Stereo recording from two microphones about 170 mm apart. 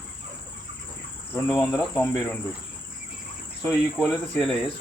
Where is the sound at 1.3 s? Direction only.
10° left (ahead or behind).